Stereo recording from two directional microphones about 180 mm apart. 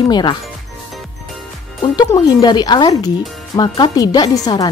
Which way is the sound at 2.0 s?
20° left (ahead or behind).